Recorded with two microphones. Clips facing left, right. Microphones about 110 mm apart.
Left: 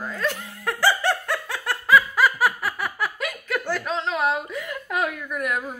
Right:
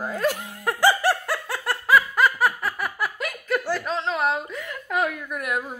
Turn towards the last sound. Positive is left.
turn(degrees=-5)  # may be behind; listen again after turning